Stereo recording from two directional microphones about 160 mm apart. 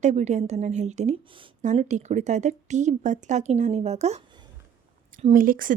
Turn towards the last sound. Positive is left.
turn(degrees=-60)  # may be behind; listen again after turning